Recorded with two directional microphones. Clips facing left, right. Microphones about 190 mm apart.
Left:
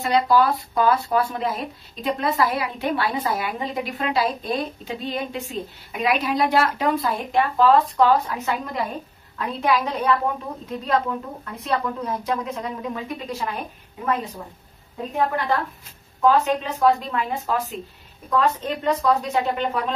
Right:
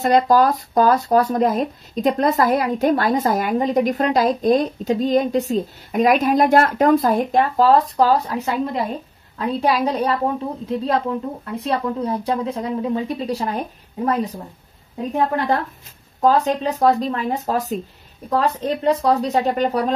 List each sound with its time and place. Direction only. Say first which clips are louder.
0.0 s speech: right 4 dB; 45° right (ahead or behind)
16.2 s speech: right 2 dB; 40° right (ahead or behind)